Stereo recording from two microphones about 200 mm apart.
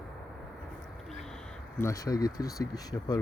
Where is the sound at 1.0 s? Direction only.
Centre (ahead or behind).